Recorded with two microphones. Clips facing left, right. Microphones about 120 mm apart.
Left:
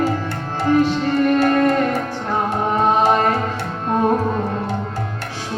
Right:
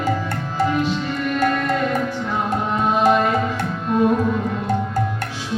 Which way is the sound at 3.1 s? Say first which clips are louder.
Left 1 dB; 50° left (ahead or behind).